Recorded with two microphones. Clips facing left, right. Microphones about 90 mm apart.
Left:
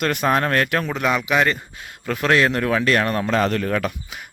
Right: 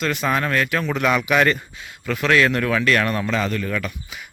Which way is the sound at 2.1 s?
30° left (ahead or behind).